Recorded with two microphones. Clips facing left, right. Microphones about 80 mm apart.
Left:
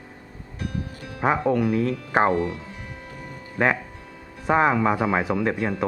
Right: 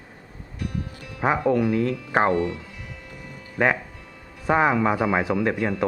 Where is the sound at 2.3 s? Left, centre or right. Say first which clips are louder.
Right 1 dB; left.